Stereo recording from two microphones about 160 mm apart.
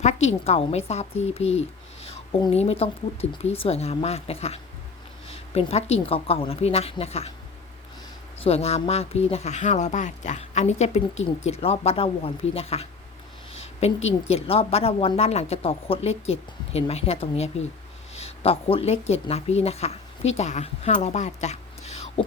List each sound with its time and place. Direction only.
0.0 s a woman's voice: 45° left (ahead or behind)
8.4 s a woman's voice: 40° left (ahead or behind)